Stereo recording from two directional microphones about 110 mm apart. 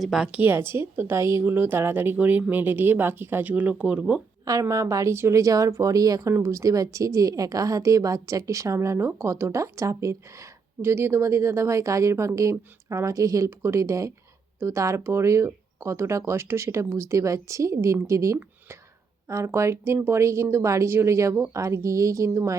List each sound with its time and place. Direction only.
0.0 s speech: 5° right (ahead or behind)
4.4 s speech: 30° right (ahead or behind)